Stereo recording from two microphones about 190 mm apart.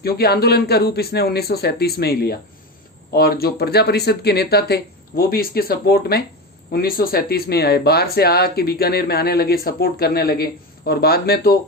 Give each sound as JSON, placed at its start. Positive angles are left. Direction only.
{"t": 0.0, "sound": "speech", "side_deg": 55}